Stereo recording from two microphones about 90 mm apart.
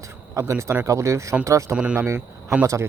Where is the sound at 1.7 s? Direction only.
15° right (ahead or behind).